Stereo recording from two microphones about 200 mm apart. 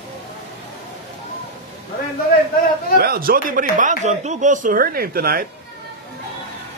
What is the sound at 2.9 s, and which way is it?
Speech, 50° right (ahead or behind).